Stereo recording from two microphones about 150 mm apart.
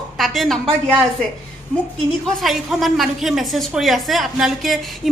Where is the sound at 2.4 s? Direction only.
Centre (ahead or behind).